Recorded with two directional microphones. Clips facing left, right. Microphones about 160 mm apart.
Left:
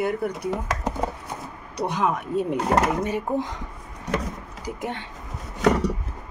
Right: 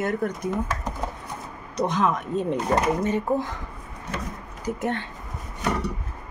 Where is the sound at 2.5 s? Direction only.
80° left.